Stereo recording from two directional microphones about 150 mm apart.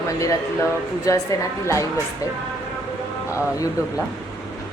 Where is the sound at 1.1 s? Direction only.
20° left (ahead or behind).